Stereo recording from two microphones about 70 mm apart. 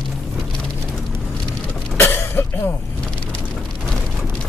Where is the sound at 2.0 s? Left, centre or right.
Left.